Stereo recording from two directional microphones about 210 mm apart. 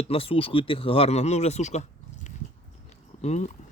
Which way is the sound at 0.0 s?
25° left (ahead or behind).